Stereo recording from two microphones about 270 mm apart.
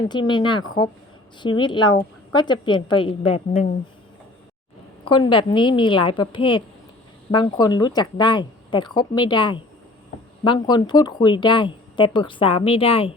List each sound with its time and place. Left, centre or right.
0.1 s speech: centre
5.0 s speech: centre